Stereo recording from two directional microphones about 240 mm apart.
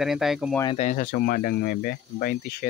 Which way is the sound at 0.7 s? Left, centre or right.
Left.